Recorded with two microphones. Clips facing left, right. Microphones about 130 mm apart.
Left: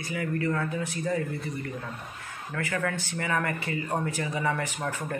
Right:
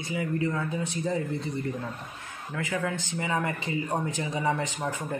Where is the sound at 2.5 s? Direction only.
15° right (ahead or behind).